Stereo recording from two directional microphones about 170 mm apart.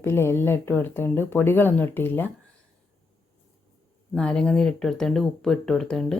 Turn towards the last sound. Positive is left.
turn(degrees=5)  # may be behind; listen again after turning